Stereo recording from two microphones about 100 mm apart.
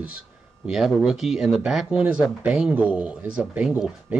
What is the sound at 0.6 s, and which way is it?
Speech, 5° right (ahead or behind).